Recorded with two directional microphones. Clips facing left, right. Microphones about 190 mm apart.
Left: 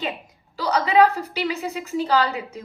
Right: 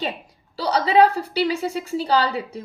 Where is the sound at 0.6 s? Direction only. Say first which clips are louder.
Right 1 dB; 35° right (ahead or behind).